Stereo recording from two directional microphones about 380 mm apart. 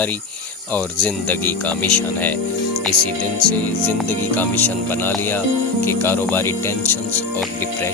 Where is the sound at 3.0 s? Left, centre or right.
Right.